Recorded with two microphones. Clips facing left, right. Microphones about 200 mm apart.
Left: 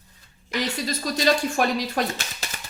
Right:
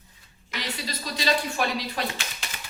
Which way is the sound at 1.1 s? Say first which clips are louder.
Left 4 dB; 45° left (ahead or behind).